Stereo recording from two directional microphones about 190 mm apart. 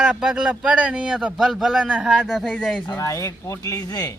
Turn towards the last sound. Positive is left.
turn(degrees=20)  # may be behind; listen again after turning